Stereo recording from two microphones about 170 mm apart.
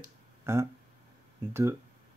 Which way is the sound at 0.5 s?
15° right (ahead or behind).